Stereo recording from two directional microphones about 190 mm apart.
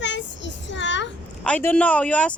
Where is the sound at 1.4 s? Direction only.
10° left (ahead or behind).